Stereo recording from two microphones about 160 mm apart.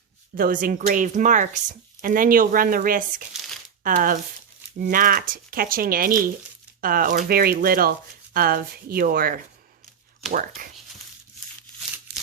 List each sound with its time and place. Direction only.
0.3 s speech: 60° right (ahead or behind)
12.1 s crumpling: 80° right